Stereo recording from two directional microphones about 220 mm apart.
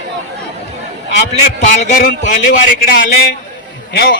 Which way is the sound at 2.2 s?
35° left (ahead or behind).